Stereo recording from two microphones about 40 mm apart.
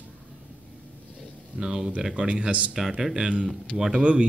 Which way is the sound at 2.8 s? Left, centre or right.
Centre.